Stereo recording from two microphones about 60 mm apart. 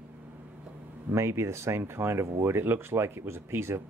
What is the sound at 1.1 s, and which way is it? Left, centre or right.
Speech, right.